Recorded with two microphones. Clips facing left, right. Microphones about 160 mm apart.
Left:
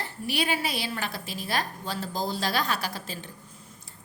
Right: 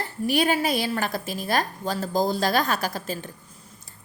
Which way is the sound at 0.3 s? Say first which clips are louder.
Right 7 dB; 45° right (ahead or behind).